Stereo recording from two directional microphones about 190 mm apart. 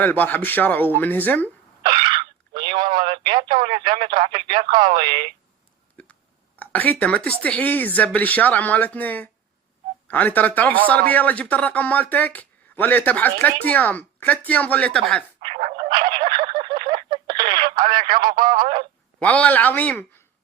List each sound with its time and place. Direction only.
0.0 s speech: 10° left (ahead or behind)
1.8 s a sound: 25° right (ahead or behind)
4.3 s speech: 25° right (ahead or behind)
6.6 s speech: 10° left (ahead or behind)
15.4 s frog: 30° right (ahead or behind)
17.8 s a sound: 25° right (ahead or behind)
19.2 s speech: 5° left (ahead or behind)